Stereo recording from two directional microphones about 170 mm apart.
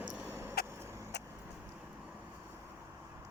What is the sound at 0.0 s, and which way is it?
Vehicle, 10° right (ahead or behind).